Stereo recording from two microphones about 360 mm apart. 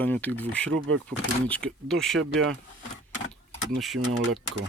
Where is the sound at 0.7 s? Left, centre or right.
Right.